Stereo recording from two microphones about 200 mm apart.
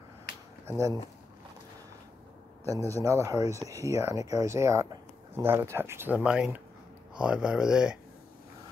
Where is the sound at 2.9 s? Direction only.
15° right (ahead or behind).